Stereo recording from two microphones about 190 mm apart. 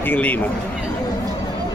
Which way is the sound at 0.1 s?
10° left (ahead or behind).